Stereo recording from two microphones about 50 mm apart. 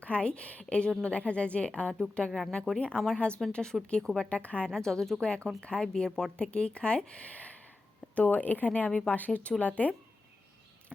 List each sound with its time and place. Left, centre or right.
0.0 s speech: left
4.7 s speech: centre; by 9.9 s left